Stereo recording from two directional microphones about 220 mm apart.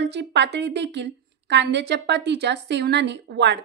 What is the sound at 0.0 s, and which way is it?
A woman's voice, 50° right (ahead or behind).